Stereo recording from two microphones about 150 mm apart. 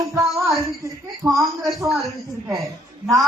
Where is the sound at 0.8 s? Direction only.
20° right (ahead or behind).